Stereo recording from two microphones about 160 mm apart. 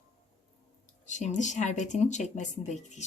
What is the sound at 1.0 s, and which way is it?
Speech, 50° left (ahead or behind).